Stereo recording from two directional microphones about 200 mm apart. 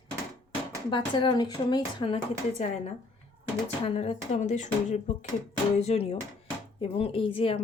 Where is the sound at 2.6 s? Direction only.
35° left (ahead or behind).